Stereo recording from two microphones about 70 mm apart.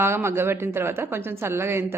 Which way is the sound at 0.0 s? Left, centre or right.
Right.